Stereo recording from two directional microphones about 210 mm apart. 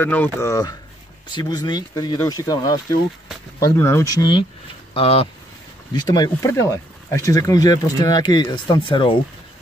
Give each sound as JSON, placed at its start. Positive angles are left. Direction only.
{"t": 0.0, "sound": "speech", "side_deg": 10}